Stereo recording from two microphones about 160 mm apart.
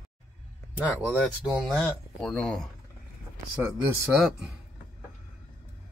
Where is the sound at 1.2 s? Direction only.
Centre (ahead or behind).